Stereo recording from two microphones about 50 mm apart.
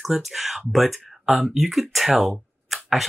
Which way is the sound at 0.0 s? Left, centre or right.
Centre.